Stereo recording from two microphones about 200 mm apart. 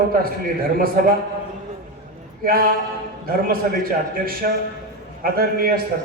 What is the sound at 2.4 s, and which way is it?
A man's voice, 50° right (ahead or behind).